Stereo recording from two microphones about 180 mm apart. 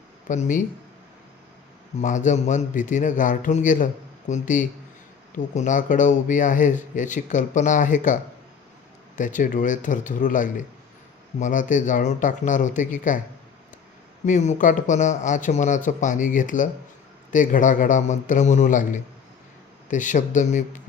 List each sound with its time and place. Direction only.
0.3 s speech: 45° left (ahead or behind)
2.0 s speech: 45° left (ahead or behind)
14.3 s speech: 45° left (ahead or behind)